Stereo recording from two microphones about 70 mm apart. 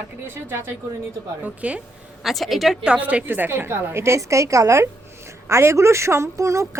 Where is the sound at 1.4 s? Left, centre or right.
Centre.